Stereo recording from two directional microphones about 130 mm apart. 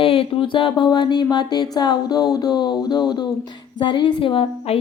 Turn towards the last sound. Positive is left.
turn(degrees=45)  # may be behind; listen again after turning